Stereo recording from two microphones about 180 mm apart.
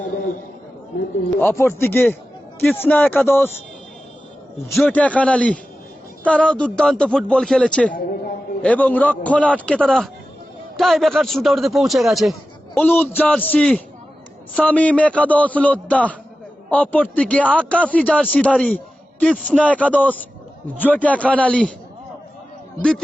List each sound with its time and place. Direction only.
1.4 s a man's voice: 15° left (ahead or behind)
4.7 s a man's voice: 5° left (ahead or behind)
7.9 s a woman's voice: 55° left (ahead or behind)
8.6 s a man's voice: 10° left (ahead or behind)
12.7 s a man's voice: 10° left (ahead or behind)